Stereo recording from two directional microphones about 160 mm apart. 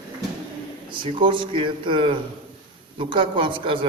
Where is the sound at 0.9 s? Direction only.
30° right (ahead or behind).